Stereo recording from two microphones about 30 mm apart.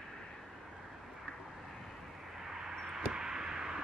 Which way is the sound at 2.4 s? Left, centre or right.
Centre.